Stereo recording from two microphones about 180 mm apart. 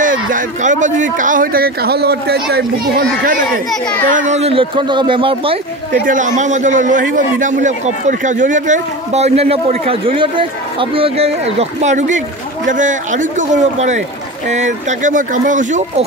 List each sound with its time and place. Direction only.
0.0 s speech: 50° right (ahead or behind)
4.1 s speech: 45° right (ahead or behind)
6.0 s a man's voice: 45° right (ahead or behind)